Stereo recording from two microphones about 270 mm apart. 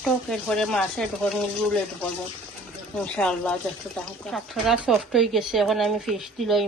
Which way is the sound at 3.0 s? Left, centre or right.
Centre.